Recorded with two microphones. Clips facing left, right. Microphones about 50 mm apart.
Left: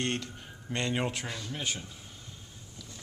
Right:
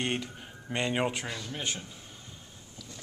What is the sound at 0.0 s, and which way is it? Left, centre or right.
Speech, centre.